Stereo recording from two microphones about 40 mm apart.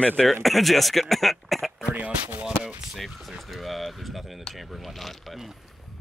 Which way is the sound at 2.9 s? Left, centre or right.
Centre.